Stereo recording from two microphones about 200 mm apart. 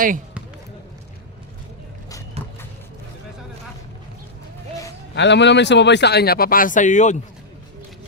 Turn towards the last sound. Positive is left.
turn(degrees=35)  # may be behind; listen again after turning